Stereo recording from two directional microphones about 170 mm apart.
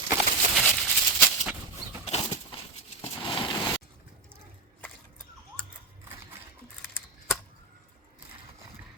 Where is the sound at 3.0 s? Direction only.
30° left (ahead or behind).